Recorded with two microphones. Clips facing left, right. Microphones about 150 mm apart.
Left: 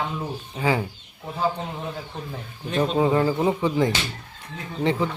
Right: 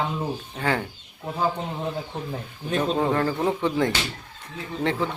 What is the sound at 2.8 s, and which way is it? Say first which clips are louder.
Speech: left 3 dB; 10° left (ahead or behind).